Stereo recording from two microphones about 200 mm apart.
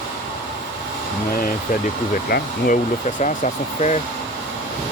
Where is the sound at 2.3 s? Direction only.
50° left (ahead or behind).